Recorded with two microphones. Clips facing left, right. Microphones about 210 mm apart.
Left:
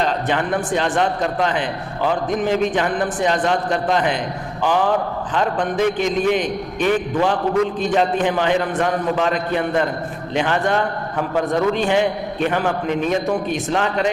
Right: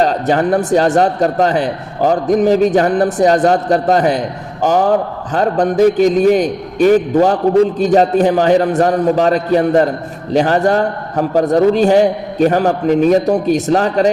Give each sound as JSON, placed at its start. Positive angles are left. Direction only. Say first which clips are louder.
{"t": 0.0, "sound": "a man's voice", "louder": "right 7 dB", "side_deg": -40}